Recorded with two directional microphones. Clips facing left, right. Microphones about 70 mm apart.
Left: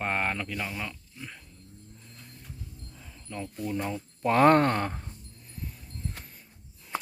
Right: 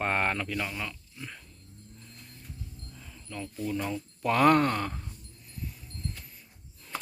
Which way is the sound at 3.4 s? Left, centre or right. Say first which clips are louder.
Even; left.